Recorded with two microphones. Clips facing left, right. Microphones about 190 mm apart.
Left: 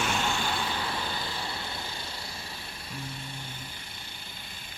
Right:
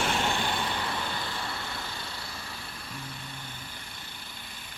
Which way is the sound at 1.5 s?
25° left (ahead or behind).